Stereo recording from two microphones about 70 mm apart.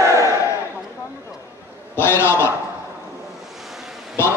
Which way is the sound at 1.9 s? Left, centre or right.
Left.